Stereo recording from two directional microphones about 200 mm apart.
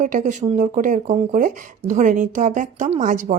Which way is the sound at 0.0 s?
40° right (ahead or behind).